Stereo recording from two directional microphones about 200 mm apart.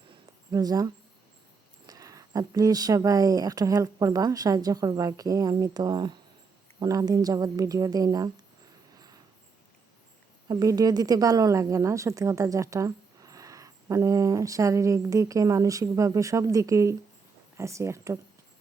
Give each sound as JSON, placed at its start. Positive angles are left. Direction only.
{"t": 0.5, "sound": "a woman's voice", "side_deg": -20}
{"t": 1.9, "sound": "a woman's voice", "side_deg": -15}
{"t": 9.0, "sound": "cricket", "side_deg": -20}
{"t": 10.5, "sound": "a woman's voice", "side_deg": -20}